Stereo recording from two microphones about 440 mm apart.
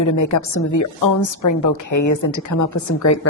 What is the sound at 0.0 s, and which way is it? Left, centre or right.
A woman's voice, left.